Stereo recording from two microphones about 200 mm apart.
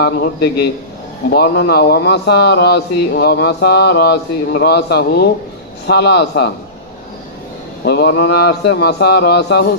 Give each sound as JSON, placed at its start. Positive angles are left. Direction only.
{"t": 0.0, "sound": "a man's voice", "side_deg": 55}
{"t": 7.9, "sound": "a man's voice", "side_deg": 55}